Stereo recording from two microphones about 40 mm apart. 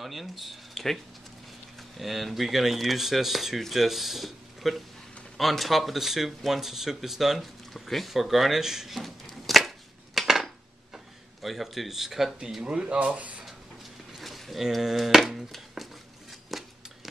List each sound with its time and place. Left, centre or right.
0.0 s speech: centre
10.2 s dishes: centre
11.4 s speech: centre
12.6 s speech: right
14.1 s a sound: centre